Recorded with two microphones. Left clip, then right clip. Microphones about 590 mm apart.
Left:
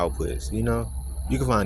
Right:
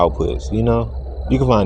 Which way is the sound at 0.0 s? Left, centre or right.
Left.